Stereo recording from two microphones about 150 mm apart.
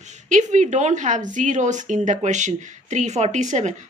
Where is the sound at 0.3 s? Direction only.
55° right (ahead or behind).